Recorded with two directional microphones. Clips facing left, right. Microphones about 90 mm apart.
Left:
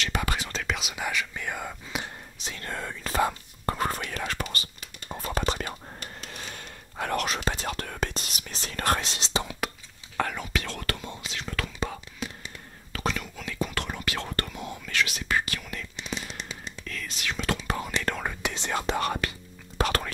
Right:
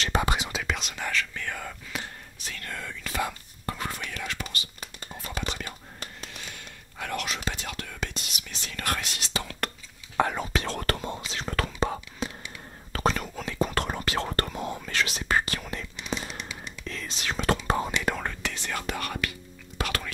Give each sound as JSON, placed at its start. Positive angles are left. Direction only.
{"t": 0.0, "sound": "whispering", "side_deg": -30}
{"t": 0.3, "sound": "whispering", "side_deg": -15}
{"t": 0.7, "sound": "whispering", "side_deg": 5}
{"t": 10.3, "sound": "whispering", "side_deg": -30}
{"t": 18.2, "sound": "whispering", "side_deg": 15}